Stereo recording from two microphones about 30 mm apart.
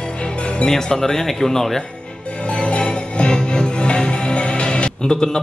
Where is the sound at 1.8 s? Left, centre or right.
Left.